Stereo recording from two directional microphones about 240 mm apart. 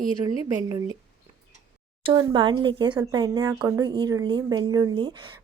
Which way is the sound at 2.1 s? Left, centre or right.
Centre.